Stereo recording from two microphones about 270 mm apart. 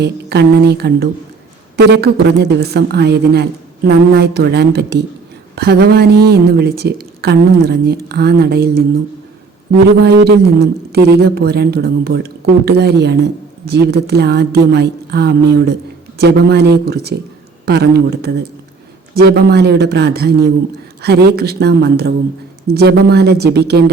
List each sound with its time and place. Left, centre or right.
0.0 s speech: right
10.0 s speech: right